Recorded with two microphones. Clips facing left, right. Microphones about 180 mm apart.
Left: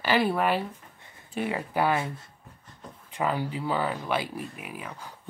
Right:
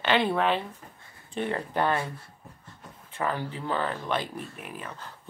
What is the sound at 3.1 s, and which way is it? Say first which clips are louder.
Speech: left 2 dB; 15° left (ahead or behind).